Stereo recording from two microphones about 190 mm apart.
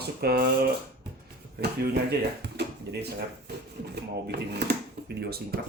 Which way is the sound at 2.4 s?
60° right (ahead or behind).